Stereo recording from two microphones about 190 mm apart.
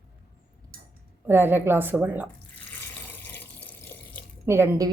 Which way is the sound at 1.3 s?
10° right (ahead or behind).